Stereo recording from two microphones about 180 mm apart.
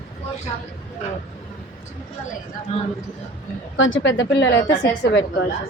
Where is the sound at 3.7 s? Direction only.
90° left.